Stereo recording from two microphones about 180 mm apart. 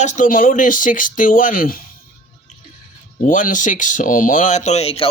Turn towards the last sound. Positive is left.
turn(degrees=30)  # may be behind; listen again after turning